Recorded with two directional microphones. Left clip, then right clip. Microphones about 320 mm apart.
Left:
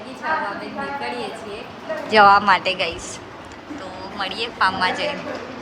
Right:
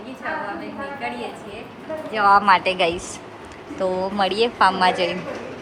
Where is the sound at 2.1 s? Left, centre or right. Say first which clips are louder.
Left 2 dB; centre.